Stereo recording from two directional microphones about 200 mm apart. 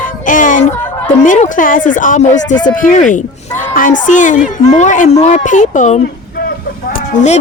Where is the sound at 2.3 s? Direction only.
65° left (ahead or behind).